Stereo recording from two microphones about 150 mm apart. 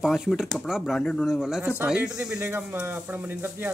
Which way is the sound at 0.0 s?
Centre (ahead or behind).